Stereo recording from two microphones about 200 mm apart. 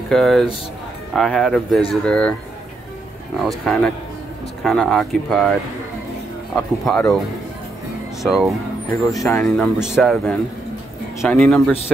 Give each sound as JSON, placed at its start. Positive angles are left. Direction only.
{"t": 0.1, "sound": "speech", "side_deg": 0}
{"t": 3.3, "sound": "speech", "side_deg": 0}
{"t": 6.5, "sound": "speech", "side_deg": 5}
{"t": 8.2, "sound": "speech", "side_deg": 0}
{"t": 9.1, "sound": "speech", "side_deg": 15}
{"t": 9.4, "sound": "speech", "side_deg": 0}